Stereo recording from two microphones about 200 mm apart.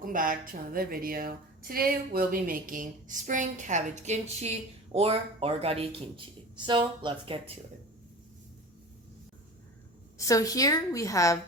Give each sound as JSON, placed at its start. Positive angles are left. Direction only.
{"t": 0.0, "sound": "a woman's voice", "side_deg": -45}
{"t": 10.2, "sound": "a woman's voice", "side_deg": 15}